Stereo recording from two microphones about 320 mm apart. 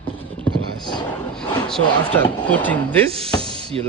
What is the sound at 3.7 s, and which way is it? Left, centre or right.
Speech, centre.